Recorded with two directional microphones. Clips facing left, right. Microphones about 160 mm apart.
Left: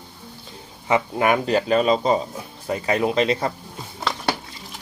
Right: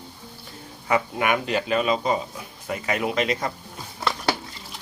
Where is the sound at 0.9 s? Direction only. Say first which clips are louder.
Left 3 dB; 35° left (ahead or behind).